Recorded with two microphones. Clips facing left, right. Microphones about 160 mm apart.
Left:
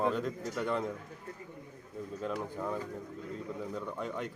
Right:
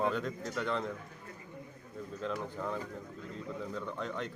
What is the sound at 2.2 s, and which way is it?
A man's voice, 10° left (ahead or behind).